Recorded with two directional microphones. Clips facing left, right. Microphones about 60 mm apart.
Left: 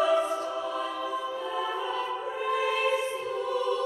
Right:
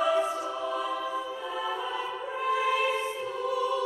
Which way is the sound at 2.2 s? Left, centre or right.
Centre.